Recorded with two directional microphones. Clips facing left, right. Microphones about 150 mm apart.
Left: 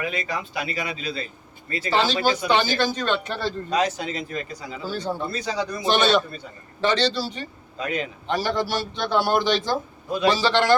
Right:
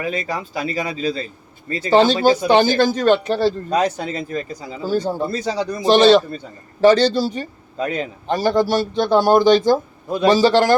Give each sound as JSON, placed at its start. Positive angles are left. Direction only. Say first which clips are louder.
{"t": 0.0, "sound": "a man's voice", "louder": "right 4 dB", "side_deg": -40}
{"t": 3.8, "sound": "a man's voice", "louder": "right 2 dB", "side_deg": -55}
{"t": 4.0, "sound": "speech", "louder": "right 5 dB", "side_deg": -35}
{"t": 6.8, "sound": "a man's voice", "louder": "right 9 dB", "side_deg": -45}
{"t": 7.8, "sound": "a man's voice", "louder": "right 5 dB", "side_deg": -30}
{"t": 8.3, "sound": "a man's voice", "louder": "right 7 dB", "side_deg": -45}